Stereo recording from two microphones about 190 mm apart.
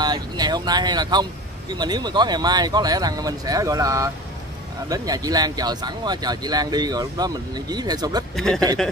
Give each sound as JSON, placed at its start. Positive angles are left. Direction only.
{"t": 0.0, "sound": "speech", "side_deg": -20}
{"t": 8.4, "sound": "speech", "side_deg": 5}